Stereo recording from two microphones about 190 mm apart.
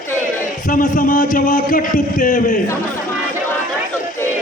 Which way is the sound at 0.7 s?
45° left (ahead or behind).